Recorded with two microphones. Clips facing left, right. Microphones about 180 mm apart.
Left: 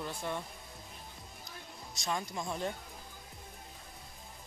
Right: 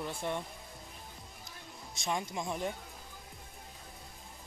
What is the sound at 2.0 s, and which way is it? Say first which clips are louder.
Speech: right 1 dB; 20° right (ahead or behind).